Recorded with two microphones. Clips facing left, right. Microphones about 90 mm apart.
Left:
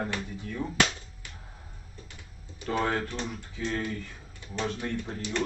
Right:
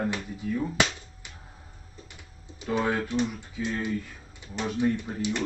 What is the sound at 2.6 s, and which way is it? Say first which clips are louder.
A man's voice: right 2 dB; 10° right (ahead or behind).